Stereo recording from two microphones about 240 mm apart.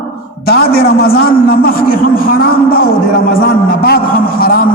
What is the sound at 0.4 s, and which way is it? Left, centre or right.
A man's voice, left.